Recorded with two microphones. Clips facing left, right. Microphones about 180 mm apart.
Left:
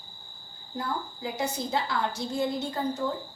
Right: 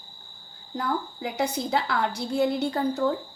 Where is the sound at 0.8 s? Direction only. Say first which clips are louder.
Right 4 dB; 70° right (ahead or behind).